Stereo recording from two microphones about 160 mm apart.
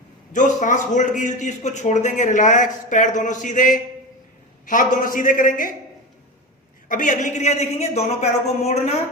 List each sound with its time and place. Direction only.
0.3 s a man's voice: 50° left (ahead or behind)
6.8 s a man's voice: 55° left (ahead or behind)